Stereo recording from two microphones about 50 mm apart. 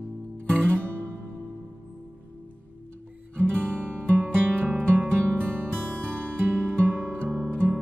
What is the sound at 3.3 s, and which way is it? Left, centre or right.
Guitar, centre.